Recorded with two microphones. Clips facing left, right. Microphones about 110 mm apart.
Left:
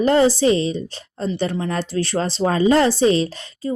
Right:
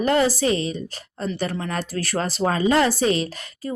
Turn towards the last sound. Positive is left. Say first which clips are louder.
# left 5 dB
turn(degrees=30)  # may be behind; listen again after turning